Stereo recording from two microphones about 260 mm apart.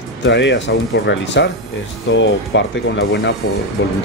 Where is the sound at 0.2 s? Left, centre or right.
Left.